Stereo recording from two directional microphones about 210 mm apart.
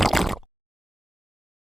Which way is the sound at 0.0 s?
Centre (ahead or behind).